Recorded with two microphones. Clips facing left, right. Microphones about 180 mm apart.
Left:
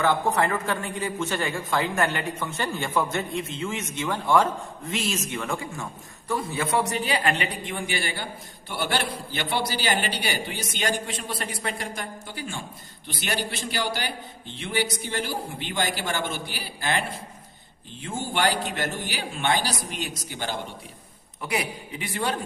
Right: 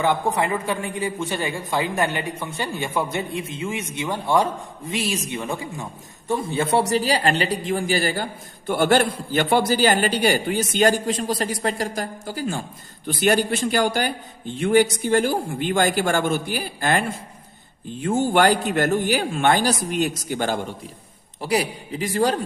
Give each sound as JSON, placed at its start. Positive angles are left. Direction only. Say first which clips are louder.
{"t": 0.0, "sound": "a man's voice", "louder": "right 1 dB", "side_deg": -15}
{"t": 21.4, "sound": "speech", "louder": "right 6 dB", "side_deg": -35}